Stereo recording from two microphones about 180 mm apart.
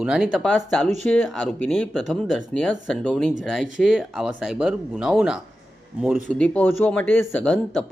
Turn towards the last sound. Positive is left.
turn(degrees=10)  # may be behind; listen again after turning